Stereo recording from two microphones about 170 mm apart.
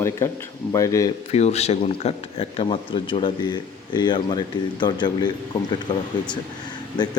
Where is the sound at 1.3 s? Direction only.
40° left (ahead or behind).